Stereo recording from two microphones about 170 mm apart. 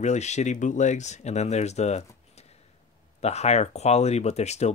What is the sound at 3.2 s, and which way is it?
Speech, 40° left (ahead or behind).